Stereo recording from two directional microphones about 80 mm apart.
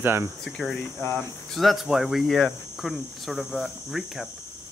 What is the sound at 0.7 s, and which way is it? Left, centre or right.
Speech, left.